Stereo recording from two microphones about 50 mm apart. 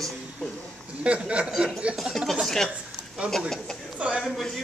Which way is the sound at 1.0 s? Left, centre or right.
Right.